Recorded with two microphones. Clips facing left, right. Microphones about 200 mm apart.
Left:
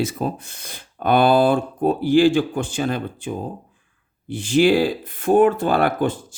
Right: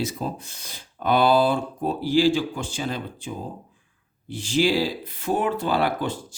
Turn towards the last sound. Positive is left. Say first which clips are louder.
# left 5 dB
turn(degrees=50)  # may be behind; listen again after turning